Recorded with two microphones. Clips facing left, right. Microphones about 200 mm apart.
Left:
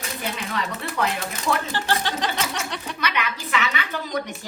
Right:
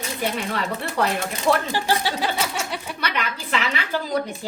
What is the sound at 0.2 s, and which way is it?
Speech, 30° right (ahead or behind).